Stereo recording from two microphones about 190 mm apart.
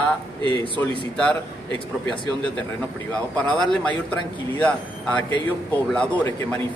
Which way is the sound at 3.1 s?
5° left (ahead or behind).